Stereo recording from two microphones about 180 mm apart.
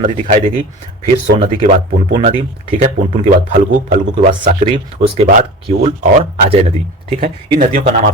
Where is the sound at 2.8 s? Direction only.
45° right (ahead or behind).